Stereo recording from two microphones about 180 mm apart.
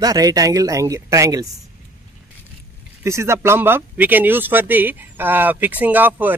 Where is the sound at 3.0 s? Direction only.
15° right (ahead or behind).